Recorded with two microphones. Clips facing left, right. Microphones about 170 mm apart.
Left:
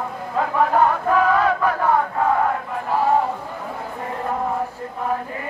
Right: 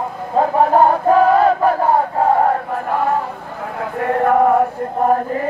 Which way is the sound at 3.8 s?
70° right (ahead or behind).